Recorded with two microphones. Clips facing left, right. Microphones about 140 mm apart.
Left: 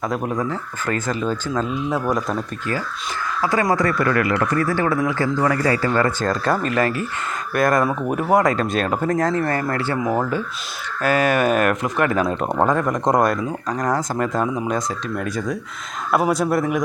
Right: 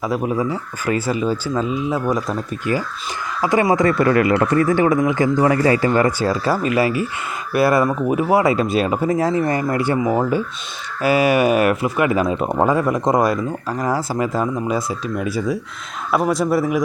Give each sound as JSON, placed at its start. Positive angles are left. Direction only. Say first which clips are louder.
{"t": 0.0, "sound": "speech", "louder": "right 3 dB", "side_deg": -5}
{"t": 3.4, "sound": "speech", "louder": "right 4 dB", "side_deg": -20}
{"t": 10.0, "sound": "speech", "louder": "right 3 dB", "side_deg": -5}